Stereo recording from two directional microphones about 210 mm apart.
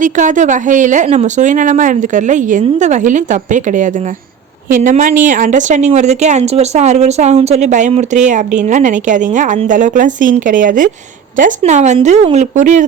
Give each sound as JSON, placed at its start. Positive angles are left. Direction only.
{"t": 0.0, "sound": "speech", "side_deg": -35}